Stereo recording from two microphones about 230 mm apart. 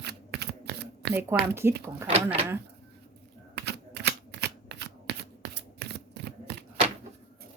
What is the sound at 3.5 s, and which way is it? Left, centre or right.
Shuffling cards, right.